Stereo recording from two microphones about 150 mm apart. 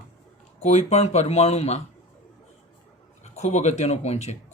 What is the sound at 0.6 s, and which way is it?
Speech, 50° left (ahead or behind).